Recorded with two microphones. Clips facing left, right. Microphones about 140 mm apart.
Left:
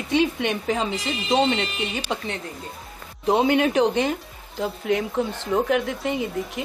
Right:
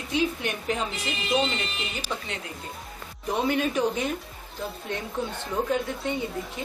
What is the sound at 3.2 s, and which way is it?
Speech, 90° left.